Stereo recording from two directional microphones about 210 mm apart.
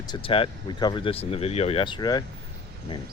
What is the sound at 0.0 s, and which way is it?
Speech, 20° left (ahead or behind).